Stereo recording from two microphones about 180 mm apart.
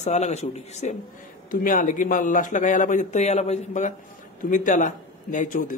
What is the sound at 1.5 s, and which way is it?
Speech, 50° left (ahead or behind).